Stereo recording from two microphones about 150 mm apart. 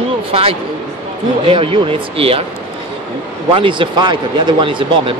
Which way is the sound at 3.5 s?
35° right (ahead or behind).